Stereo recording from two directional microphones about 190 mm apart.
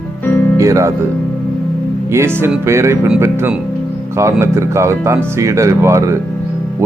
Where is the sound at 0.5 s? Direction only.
15° right (ahead or behind).